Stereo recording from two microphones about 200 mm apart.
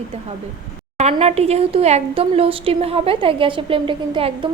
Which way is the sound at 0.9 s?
30° right (ahead or behind).